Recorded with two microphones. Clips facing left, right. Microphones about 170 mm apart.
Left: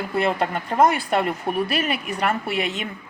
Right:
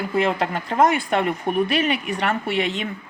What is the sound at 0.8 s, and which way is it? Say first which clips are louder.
Speech: even; 5° left (ahead or behind).